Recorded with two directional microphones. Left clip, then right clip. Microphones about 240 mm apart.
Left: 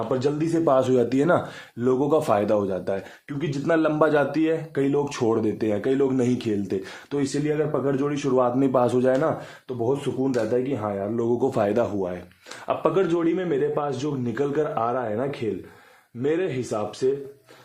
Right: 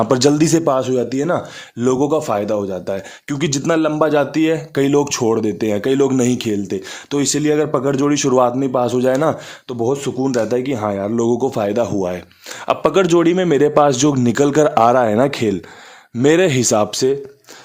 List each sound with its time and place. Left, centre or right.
0.1 s speech: right
0.6 s speech: centre
1.8 s speech: right
3.2 s speech: right
3.7 s a man's voice: right
8.5 s a man's voice: centre; by 11.3 s right
11.3 s speech: centre
12.6 s speech: right